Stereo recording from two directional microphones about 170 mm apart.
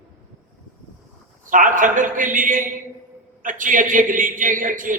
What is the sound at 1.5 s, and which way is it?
A man's voice, 50° right (ahead or behind).